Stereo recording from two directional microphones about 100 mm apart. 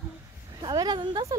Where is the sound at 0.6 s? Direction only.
45° right (ahead or behind).